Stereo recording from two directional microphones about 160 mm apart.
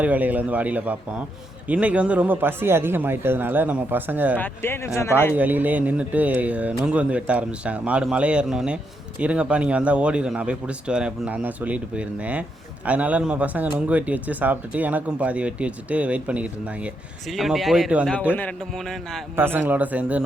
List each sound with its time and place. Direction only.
0.0 s speech: 10° right (ahead or behind)
4.4 s speech: 15° left (ahead or behind)
5.3 s a man's voice: 10° right (ahead or behind)
19.4 s speech: 15° right (ahead or behind)